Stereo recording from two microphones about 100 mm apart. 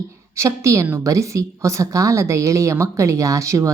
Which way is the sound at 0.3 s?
30° right (ahead or behind).